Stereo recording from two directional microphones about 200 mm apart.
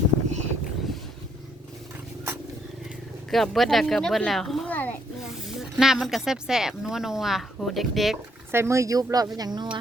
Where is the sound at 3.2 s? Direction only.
Centre (ahead or behind).